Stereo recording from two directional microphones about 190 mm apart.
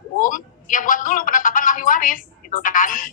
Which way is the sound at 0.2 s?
45° left (ahead or behind).